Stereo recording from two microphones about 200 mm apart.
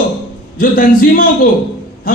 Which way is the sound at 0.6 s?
45° left (ahead or behind).